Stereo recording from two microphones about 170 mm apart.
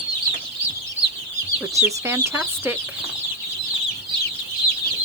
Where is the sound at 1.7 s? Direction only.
15° right (ahead or behind).